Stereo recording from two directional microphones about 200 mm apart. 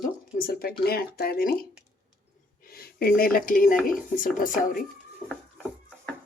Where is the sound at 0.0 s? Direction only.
45° left (ahead or behind).